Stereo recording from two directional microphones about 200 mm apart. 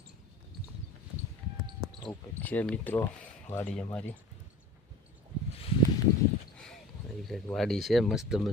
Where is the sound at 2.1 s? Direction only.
10° left (ahead or behind).